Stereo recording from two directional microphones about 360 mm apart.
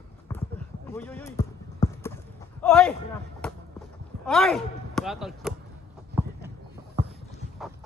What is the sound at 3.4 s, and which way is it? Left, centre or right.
Run, centre.